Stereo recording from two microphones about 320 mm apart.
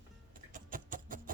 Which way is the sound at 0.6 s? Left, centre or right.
Right.